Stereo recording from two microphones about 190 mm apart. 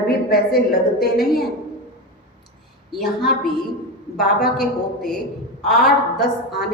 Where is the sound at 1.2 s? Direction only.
Centre (ahead or behind).